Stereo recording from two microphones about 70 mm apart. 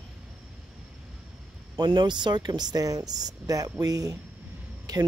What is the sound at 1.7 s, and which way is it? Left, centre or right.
Speech, right.